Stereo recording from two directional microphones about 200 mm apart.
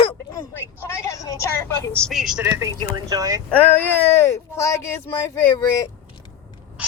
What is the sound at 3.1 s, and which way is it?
Speech, 20° right (ahead or behind).